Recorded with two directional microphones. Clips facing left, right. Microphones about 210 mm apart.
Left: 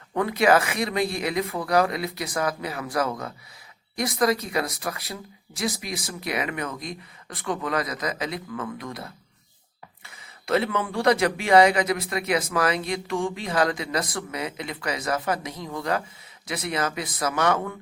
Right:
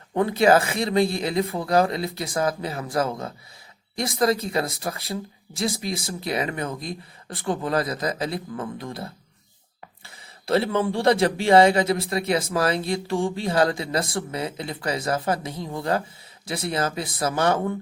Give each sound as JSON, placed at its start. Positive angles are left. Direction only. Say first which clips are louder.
{"t": 0.1, "sound": "speech", "louder": "right 2 dB", "side_deg": -30}